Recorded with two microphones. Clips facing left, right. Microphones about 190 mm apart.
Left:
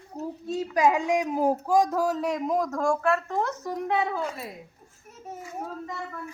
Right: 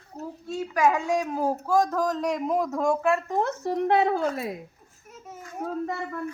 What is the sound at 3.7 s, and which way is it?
Speech, 70° right (ahead or behind).